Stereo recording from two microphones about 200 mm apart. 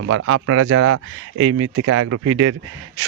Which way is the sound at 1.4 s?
80° right.